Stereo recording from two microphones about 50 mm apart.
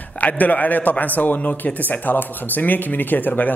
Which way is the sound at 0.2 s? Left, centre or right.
Left.